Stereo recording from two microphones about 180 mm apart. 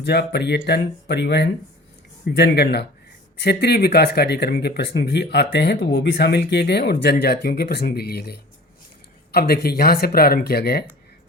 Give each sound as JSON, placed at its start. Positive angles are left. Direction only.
{"t": 0.0, "sound": "speech", "side_deg": 65}